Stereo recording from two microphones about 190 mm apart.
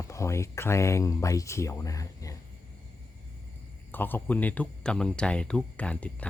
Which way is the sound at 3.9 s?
10° left (ahead or behind).